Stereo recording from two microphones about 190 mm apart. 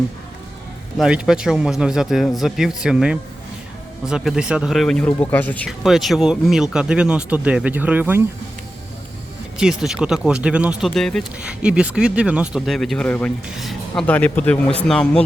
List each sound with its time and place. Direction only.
0.9 s speech: 5° right (ahead or behind)
9.6 s speech: 5° right (ahead or behind)